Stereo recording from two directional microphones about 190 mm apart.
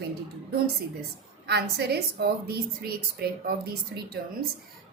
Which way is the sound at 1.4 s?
60° right (ahead or behind).